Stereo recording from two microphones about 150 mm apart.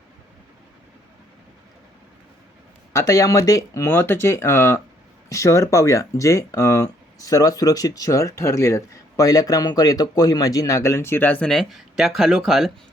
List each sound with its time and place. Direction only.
2.9 s speech: 20° left (ahead or behind); by 12.7 s centre (ahead or behind)